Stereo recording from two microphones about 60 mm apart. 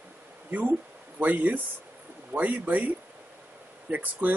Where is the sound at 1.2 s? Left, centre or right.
Right.